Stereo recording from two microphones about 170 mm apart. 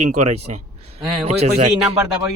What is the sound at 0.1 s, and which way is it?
Speech, 40° right (ahead or behind).